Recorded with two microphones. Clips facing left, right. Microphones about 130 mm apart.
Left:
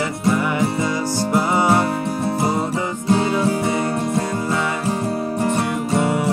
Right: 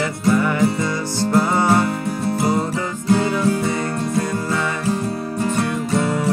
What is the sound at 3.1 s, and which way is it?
Music, 25° left (ahead or behind).